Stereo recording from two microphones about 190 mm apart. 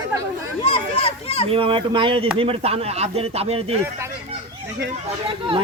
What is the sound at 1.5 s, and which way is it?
Speech, 25° right (ahead or behind).